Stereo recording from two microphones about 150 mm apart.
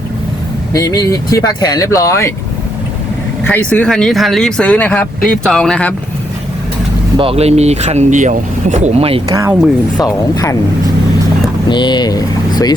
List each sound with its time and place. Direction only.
0.7 s speech: 25° left (ahead or behind)
3.4 s speech: 10° left (ahead or behind)
7.2 s speech: 40° right (ahead or behind)
9.3 s speech: 20° right (ahead or behind)
10.0 s speech: 25° left (ahead or behind)
11.7 s vehicle: 30° left (ahead or behind)